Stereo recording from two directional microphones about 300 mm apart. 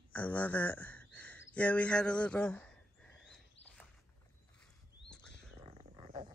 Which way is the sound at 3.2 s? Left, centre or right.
Centre.